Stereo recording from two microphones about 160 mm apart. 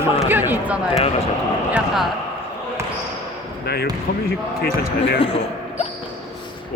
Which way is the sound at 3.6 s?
90° left.